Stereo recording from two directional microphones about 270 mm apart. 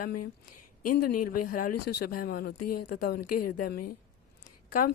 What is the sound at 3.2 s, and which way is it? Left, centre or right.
Speech, left.